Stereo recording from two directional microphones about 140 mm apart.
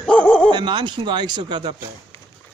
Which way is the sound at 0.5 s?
35° right (ahead or behind).